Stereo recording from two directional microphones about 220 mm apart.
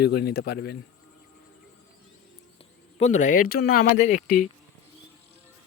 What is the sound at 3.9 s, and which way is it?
Speech, 35° left (ahead or behind).